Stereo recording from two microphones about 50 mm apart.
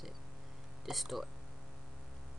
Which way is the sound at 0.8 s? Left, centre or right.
Centre.